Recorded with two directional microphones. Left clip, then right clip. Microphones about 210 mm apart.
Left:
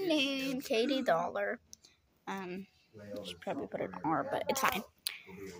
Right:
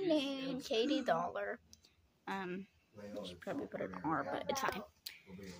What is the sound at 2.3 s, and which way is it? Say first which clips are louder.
A child's voice: left 1 dB; 5° left (ahead or behind).